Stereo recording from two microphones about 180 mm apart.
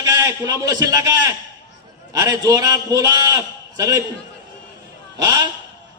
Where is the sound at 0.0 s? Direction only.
20° right (ahead or behind).